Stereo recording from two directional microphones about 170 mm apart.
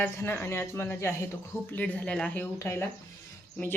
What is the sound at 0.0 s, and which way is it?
Speech, 10° left (ahead or behind).